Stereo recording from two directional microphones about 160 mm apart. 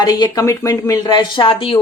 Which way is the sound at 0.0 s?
25° left (ahead or behind).